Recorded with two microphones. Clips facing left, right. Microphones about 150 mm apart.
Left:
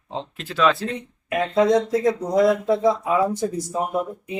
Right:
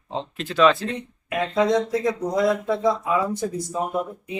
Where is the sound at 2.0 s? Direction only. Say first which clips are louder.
Left 3 dB; 15° left (ahead or behind).